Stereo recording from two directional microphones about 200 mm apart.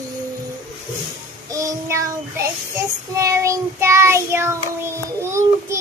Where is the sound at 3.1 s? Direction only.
15° right (ahead or behind).